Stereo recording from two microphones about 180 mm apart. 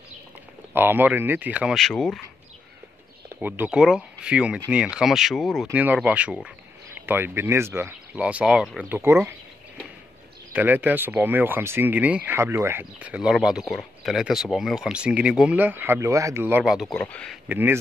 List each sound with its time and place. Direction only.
0.7 s speech: 10° right (ahead or behind)
3.3 s speech: 10° right (ahead or behind)
10.5 s speech: 10° right (ahead or behind)
17.5 s speech: 10° right (ahead or behind)